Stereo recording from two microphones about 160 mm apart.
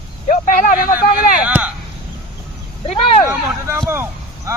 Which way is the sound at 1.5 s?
10° right (ahead or behind).